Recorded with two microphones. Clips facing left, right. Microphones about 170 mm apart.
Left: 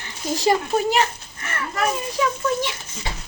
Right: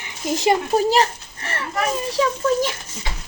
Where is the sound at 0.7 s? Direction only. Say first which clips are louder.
Right 3 dB; 35° right (ahead or behind).